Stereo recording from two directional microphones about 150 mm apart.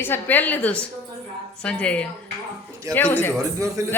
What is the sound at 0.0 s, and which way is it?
A woman's voice, 15° left (ahead or behind).